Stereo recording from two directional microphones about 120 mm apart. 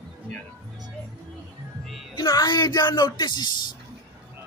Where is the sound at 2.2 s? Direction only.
35° left (ahead or behind).